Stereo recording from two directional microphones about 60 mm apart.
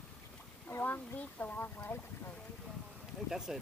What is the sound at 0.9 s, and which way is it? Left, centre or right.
Speech, left.